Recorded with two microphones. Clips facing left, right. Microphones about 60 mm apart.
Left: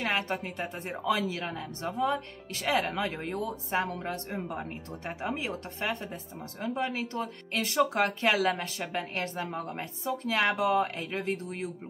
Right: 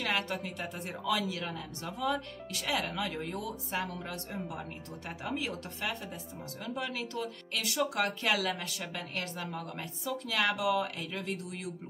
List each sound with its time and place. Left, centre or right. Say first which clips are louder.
0.0 s speech: left 3 dB; left